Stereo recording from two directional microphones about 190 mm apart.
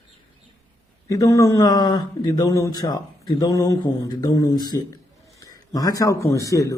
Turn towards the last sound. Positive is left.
turn(degrees=15)  # may be behind; listen again after turning